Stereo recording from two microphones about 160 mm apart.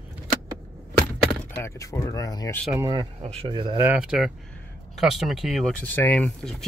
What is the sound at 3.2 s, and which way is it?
Speech, 40° right (ahead or behind).